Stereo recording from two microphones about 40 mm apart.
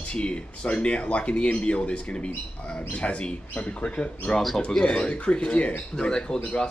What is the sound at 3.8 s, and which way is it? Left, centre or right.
A man's voice, left.